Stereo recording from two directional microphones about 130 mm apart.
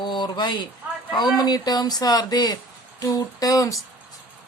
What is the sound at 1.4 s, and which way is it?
Speech, 30° left (ahead or behind).